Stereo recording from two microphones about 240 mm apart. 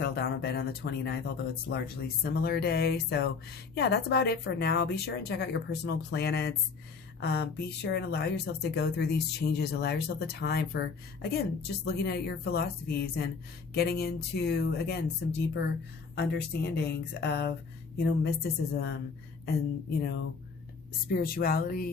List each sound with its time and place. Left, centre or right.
0.0 s speech: left
2.2 s speech: left
20.0 s speech: left